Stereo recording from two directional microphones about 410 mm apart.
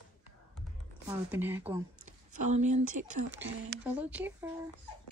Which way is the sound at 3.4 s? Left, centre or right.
Centre.